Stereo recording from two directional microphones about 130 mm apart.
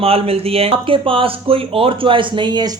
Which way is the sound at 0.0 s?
50° right (ahead or behind).